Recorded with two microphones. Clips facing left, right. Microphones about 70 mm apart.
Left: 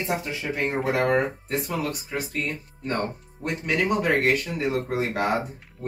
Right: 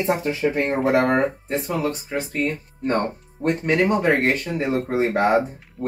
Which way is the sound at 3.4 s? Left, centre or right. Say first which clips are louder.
Right 5 dB; right.